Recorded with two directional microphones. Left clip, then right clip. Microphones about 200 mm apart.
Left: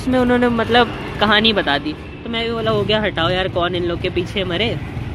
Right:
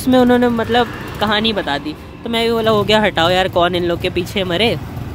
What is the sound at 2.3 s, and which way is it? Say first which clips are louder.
Speech: right 5 dB; 30° right (ahead or behind).